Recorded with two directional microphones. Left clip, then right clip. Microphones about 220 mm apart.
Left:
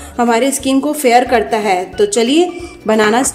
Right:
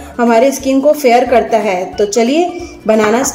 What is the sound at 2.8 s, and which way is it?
Speech, 15° left (ahead or behind).